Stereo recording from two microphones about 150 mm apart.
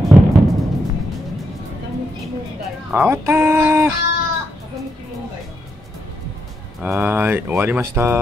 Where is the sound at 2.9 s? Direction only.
15° right (ahead or behind).